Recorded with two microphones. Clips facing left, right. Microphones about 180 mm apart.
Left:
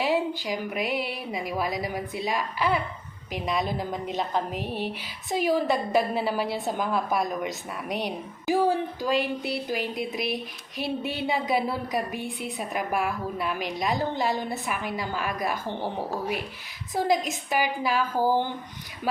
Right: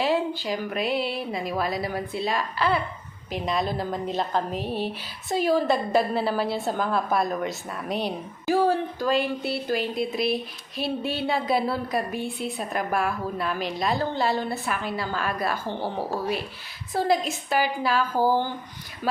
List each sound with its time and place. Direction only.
0.0 s a woman's voice: 15° left (ahead or behind)
16.9 s a woman's voice: 15° left (ahead or behind)